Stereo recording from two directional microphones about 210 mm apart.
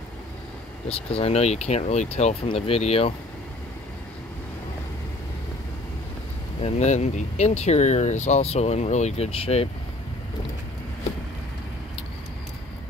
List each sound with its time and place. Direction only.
0.8 s speech: 30° left (ahead or behind)
6.6 s speech: 35° left (ahead or behind)